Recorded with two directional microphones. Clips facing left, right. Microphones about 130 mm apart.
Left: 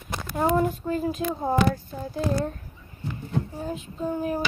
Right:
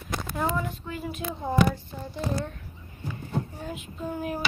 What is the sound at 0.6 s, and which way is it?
Speech, 40° left (ahead or behind).